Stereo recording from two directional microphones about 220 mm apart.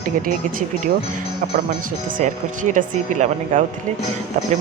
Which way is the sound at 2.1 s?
35° right (ahead or behind).